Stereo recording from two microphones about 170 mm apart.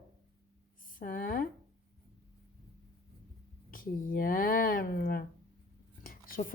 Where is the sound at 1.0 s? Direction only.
55° left (ahead or behind).